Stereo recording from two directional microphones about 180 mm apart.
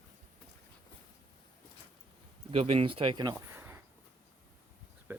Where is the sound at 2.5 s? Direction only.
30° right (ahead or behind); by 3.8 s 15° right (ahead or behind).